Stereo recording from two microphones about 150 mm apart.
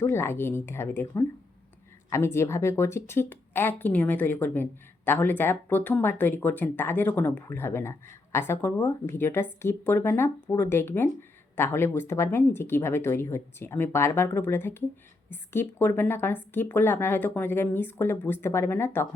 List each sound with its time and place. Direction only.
0.0 s speech: 15° left (ahead or behind)